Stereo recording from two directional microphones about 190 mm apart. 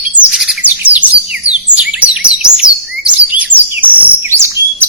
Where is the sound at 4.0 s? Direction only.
15° right (ahead or behind).